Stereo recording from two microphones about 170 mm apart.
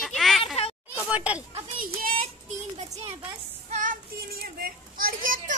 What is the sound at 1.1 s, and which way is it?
Speech, 10° right (ahead or behind).